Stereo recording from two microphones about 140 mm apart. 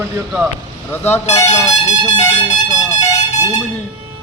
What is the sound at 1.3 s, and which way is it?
Speech, 55° left (ahead or behind).